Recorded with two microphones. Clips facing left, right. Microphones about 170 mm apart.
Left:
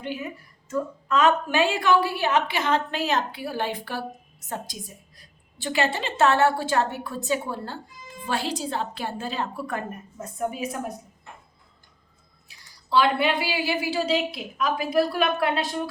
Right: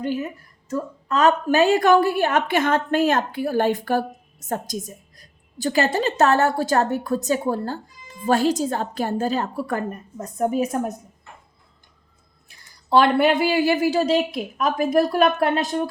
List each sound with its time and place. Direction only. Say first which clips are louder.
0.0 s a woman's voice: right 7 dB; 40° right (ahead or behind)
12.5 s a woman's voice: right 7 dB; 50° right (ahead or behind)